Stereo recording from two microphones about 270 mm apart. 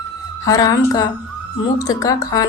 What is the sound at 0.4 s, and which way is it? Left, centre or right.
A woman's voice, centre.